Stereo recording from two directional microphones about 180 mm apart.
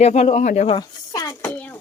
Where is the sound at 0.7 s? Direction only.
20° left (ahead or behind).